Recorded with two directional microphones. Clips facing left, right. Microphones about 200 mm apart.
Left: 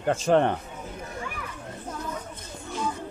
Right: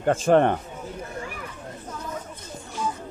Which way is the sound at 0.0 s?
55° right (ahead or behind).